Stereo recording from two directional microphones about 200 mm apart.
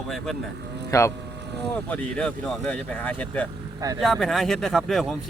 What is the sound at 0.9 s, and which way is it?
Speech, 15° left (ahead or behind).